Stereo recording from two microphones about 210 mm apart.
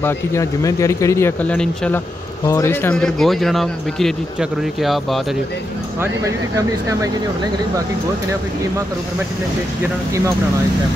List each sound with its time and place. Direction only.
0.0 s speech: 15° left (ahead or behind)
5.9 s speech: 15° right (ahead or behind)